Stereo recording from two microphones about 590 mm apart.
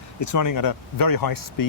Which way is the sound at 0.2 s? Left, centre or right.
Left.